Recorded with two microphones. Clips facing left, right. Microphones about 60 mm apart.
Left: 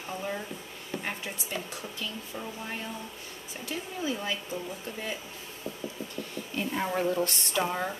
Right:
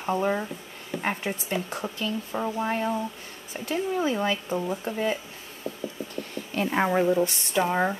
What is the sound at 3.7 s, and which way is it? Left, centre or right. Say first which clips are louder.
Speech: right 8 dB; right.